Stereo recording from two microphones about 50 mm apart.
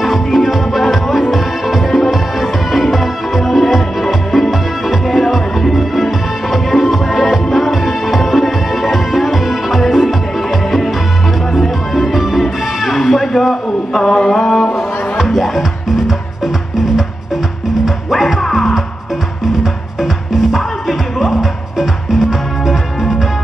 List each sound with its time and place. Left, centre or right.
0.0 s music: centre
11.5 s music: centre
17.8 s music: centre